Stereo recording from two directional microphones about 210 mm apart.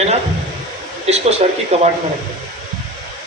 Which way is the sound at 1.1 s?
30° right (ahead or behind).